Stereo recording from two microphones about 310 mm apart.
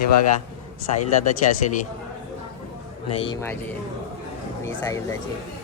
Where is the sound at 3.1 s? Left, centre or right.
Centre.